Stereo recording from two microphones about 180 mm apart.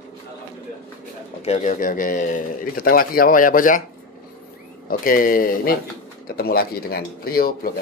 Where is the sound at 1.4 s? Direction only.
40° left (ahead or behind).